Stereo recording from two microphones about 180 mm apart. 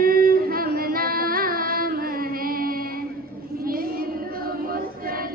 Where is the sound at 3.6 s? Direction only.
55° right (ahead or behind).